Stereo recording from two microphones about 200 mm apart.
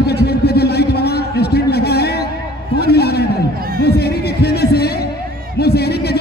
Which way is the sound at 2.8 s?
55° left (ahead or behind).